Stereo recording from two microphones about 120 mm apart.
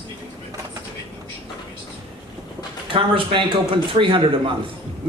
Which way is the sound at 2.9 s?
45° right (ahead or behind).